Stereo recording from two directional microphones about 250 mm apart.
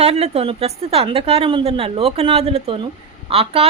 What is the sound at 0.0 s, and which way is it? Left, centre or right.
A woman's voice, right.